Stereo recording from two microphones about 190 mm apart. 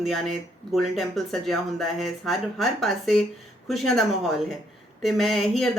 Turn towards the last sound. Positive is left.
turn(degrees=0)  # may be behind; listen again after turning